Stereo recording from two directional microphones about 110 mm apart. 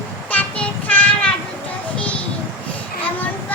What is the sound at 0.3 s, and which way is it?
Child singing, 10° left (ahead or behind).